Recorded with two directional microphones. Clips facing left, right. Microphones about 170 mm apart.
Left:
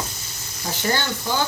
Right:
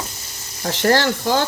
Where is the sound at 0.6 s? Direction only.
75° right (ahead or behind).